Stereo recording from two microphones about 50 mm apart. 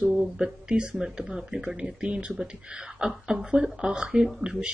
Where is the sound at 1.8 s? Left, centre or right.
Centre.